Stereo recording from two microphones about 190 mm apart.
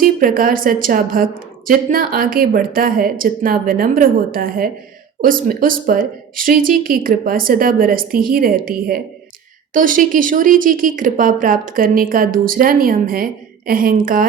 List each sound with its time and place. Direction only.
0.0 s speech: 45° right (ahead or behind)